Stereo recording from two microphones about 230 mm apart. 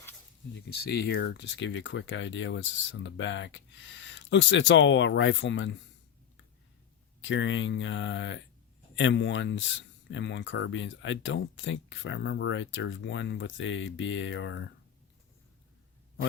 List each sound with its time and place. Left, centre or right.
0.7 s speech: left
7.2 s speech: left